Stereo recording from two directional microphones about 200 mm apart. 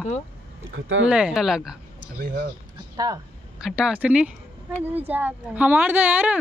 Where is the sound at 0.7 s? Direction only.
70° right (ahead or behind).